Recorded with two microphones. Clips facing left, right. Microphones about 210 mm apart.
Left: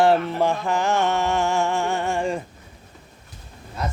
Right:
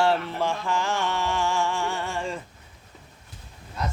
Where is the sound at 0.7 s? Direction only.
20° left (ahead or behind).